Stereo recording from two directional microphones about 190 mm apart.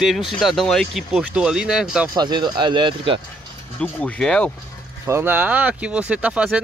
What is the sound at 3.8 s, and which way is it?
Speech, 5° left (ahead or behind).